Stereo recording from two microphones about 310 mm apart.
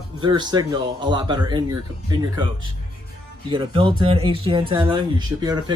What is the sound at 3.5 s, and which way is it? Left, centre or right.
Speech, centre.